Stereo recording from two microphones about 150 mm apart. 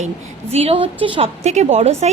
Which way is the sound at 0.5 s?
40° right (ahead or behind).